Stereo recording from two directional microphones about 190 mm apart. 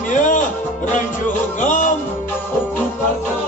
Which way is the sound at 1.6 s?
45° left (ahead or behind).